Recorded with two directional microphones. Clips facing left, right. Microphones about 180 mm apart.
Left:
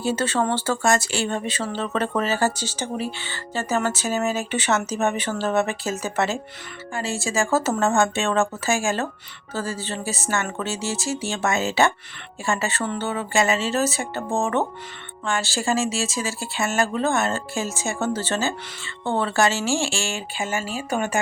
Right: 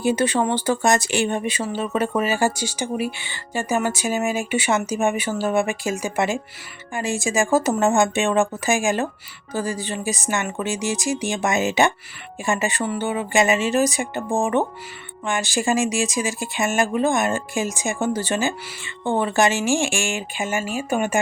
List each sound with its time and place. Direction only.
0.0 s speech: 15° right (ahead or behind)